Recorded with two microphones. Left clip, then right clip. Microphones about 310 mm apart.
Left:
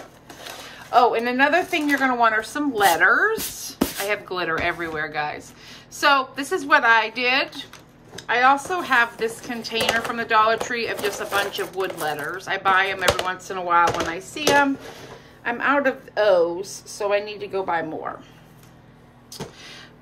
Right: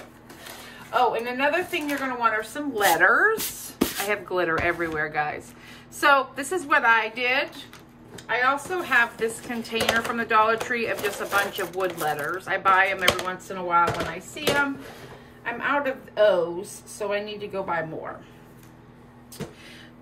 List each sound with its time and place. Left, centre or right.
0.9 s speech: centre
13.5 s speech: centre